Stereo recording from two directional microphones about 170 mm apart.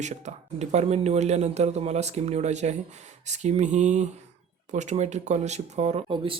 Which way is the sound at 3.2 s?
40° right (ahead or behind).